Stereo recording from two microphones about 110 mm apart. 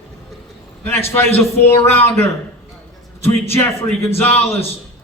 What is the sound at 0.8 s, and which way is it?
A man's voice, 20° left (ahead or behind).